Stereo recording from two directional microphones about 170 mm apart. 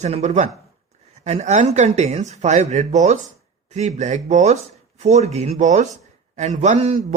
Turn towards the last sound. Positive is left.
turn(degrees=-40)  # may be behind; listen again after turning